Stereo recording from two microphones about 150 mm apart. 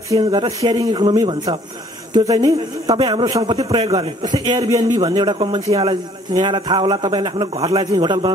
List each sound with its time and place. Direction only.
0.2 s a man's voice: 30° right (ahead or behind)